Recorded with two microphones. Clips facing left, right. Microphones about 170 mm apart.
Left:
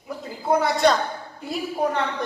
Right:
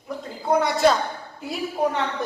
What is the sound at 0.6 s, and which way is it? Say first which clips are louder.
A man's voice: right 1 dB; centre (ahead or behind).